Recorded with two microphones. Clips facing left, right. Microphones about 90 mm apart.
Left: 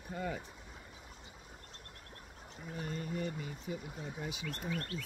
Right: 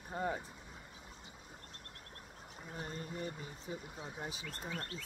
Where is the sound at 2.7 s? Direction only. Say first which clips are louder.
Left 4 dB; 30° right (ahead or behind).